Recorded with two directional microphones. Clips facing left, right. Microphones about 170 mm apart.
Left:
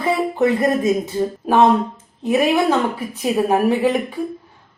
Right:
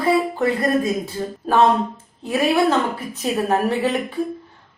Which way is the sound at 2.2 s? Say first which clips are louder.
Left 2 dB; 15° left (ahead or behind).